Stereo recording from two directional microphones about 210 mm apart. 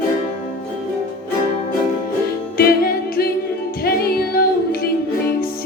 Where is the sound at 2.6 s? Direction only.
45° left (ahead or behind).